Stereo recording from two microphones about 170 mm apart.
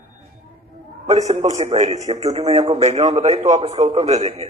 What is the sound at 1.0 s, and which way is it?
A man's voice, 40° right (ahead or behind).